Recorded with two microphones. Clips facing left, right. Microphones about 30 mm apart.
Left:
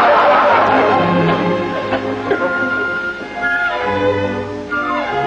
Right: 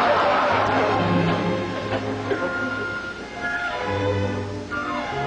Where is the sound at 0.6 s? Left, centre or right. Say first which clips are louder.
Left 8 dB; left.